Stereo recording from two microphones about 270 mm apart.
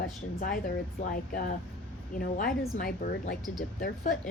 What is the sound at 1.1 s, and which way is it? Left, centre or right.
Speech, left.